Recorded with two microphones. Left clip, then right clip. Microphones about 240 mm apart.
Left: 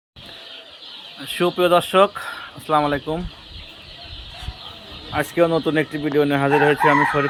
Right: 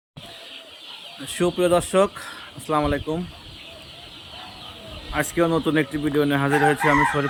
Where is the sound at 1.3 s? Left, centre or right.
Centre.